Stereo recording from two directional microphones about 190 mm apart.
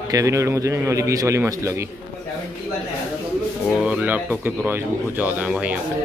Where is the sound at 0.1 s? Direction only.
15° right (ahead or behind).